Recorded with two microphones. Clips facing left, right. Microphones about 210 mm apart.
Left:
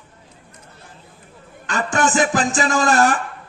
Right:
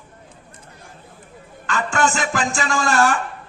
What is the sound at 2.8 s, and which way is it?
Speech, 40° left (ahead or behind).